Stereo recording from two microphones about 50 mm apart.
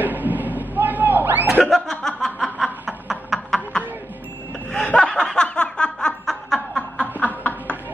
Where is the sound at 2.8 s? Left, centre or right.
Centre.